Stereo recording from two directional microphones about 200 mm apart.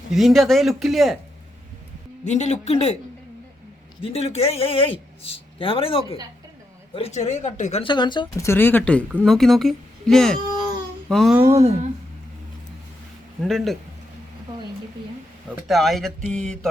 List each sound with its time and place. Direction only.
0.1 s speech: centre (ahead or behind)
2.2 s speech: 35° left (ahead or behind)
4.0 s a man's voice: 30° left (ahead or behind); by 11.3 s centre (ahead or behind)
11.3 s speech: 15° right (ahead or behind)
11.6 s speech: 30° right (ahead or behind)
13.4 s speech: centre (ahead or behind)
15.4 s speech: centre (ahead or behind)